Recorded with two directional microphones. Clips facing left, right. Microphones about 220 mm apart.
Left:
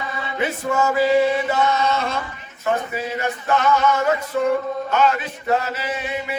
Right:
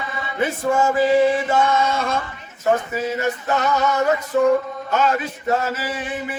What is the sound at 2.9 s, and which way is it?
Male singing, 40° right (ahead or behind).